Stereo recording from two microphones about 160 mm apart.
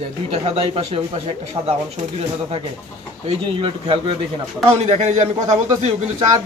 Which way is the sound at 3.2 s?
35° right (ahead or behind).